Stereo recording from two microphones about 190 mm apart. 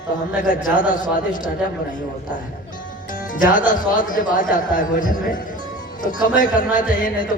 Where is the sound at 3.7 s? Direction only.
45° left (ahead or behind).